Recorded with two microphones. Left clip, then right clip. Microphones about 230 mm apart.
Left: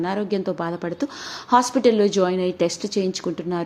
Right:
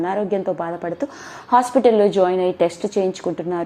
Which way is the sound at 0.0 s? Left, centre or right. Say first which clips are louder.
Right 3 dB; centre.